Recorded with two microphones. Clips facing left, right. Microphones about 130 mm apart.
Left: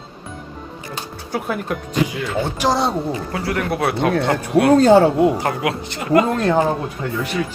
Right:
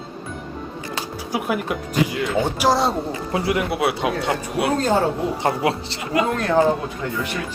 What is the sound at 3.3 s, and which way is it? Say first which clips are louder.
Speech: right 5 dB; 20° right (ahead or behind).